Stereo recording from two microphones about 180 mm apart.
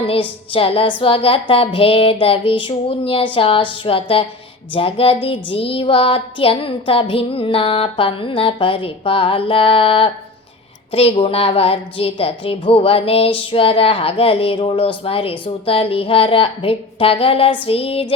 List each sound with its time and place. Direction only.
0.0 s a woman's voice: 30° left (ahead or behind)